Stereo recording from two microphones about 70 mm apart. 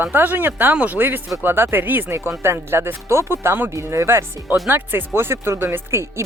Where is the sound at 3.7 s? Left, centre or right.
Right.